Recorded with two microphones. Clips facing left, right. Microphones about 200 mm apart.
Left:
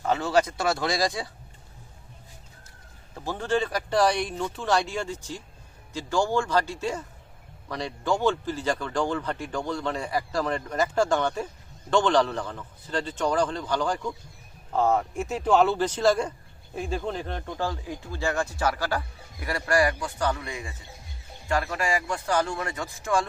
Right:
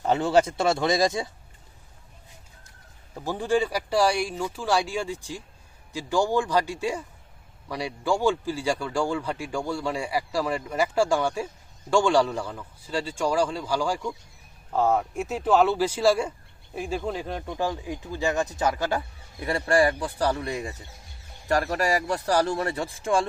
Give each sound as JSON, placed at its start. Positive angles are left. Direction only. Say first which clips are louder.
{"t": 0.0, "sound": "speech", "louder": "right 2 dB", "side_deg": -25}
{"t": 3.2, "sound": "a man's voice", "louder": "right 2 dB", "side_deg": -15}